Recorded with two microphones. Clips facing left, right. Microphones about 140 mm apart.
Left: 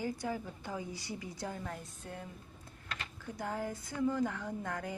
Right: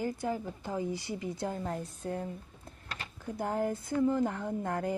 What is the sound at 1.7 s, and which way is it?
Speech, 40° right (ahead or behind).